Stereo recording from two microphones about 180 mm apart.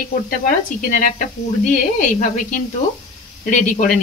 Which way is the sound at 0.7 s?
45° left (ahead or behind).